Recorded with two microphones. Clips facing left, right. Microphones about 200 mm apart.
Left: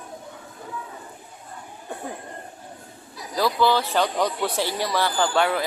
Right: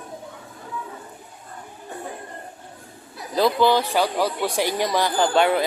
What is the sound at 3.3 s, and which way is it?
Speech, 20° right (ahead or behind).